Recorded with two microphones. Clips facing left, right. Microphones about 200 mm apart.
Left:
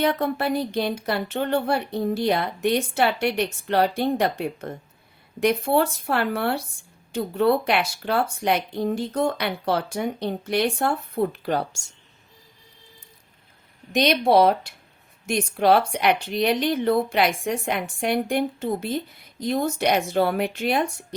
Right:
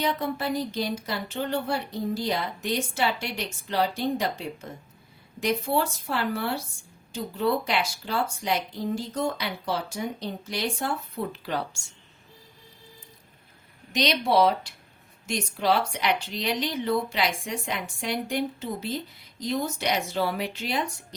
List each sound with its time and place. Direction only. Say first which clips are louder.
0.0 s speech: left 5 dB; 60° left (ahead or behind)
13.9 s speech: left 5 dB; 55° left (ahead or behind)